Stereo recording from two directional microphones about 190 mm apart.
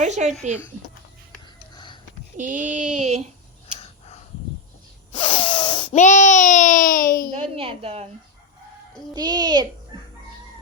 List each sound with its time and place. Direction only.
0.0 s child singing: 40° right (ahead or behind)
1.7 s a sound: 25° left (ahead or behind)
2.4 s child singing: 40° right (ahead or behind)
3.8 s a sound: 35° left (ahead or behind)
5.1 s snort: 30° left (ahead or behind)
6.0 s speech: 40° left (ahead or behind)
7.5 s a child's voice: 30° right (ahead or behind)
9.1 s a child's voice: 20° right (ahead or behind)